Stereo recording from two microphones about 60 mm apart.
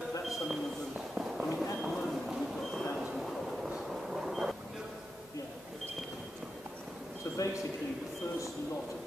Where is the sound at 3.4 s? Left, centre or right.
Centre.